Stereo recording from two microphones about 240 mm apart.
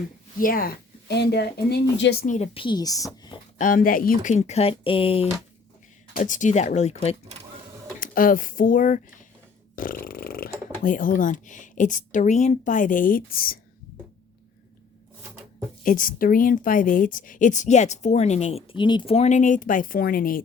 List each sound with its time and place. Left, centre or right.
0.3 s speech: left; by 3.4 s centre
3.6 s speech: left
9.7 s snoring: left
10.8 s speech: left
15.8 s speech: left